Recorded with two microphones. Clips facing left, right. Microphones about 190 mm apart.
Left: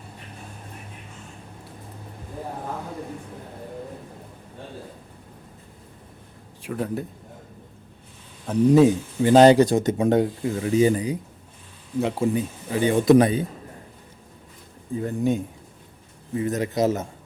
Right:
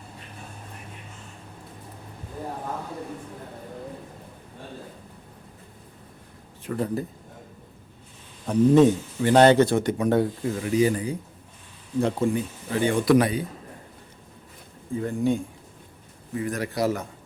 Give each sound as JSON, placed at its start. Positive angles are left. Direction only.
{"t": 6.6, "sound": "speech", "side_deg": 5}
{"t": 8.4, "sound": "a man's voice", "side_deg": 5}
{"t": 11.9, "sound": "speech", "side_deg": 5}
{"t": 12.3, "sound": "speech", "side_deg": 20}
{"t": 15.0, "sound": "speech", "side_deg": 20}